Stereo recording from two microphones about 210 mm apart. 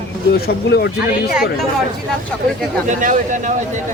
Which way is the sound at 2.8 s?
35° right (ahead or behind).